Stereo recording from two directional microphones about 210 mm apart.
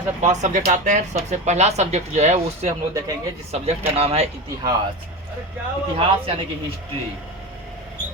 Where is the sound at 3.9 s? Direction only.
30° right (ahead or behind).